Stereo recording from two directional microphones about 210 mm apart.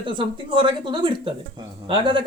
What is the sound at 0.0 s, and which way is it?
Speech, 25° right (ahead or behind).